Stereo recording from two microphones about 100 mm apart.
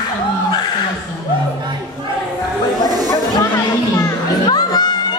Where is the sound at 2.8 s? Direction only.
40° right (ahead or behind).